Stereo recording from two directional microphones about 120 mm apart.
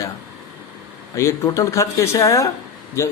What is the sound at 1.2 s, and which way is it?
Speech, 25° left (ahead or behind).